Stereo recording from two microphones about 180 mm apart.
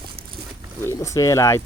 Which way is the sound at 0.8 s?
15° left (ahead or behind).